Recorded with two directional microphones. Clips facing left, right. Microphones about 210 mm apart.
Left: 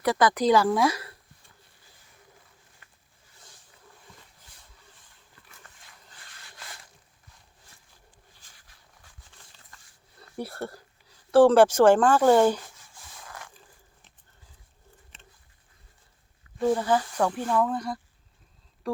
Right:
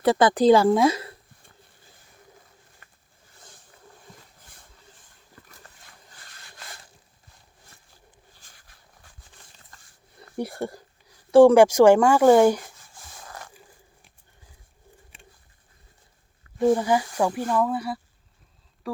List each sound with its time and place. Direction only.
0.0 s a woman's voice: 25° right (ahead or behind)
2.8 s a sound: 50° right (ahead or behind)
8.4 s a sound: 50° right (ahead or behind)
10.2 s a sound: 15° right (ahead or behind)
11.3 s speech: 10° right (ahead or behind)
12.9 s rub: 45° right (ahead or behind)
13.5 s biting: 10° right (ahead or behind)
15.1 s bird: 10° right (ahead or behind)
16.6 s speech: 15° right (ahead or behind)